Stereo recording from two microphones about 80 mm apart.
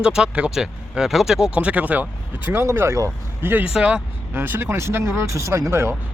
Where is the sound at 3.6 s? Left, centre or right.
Centre.